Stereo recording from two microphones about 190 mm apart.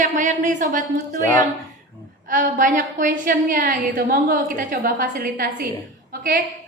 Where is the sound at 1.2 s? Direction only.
15° left (ahead or behind).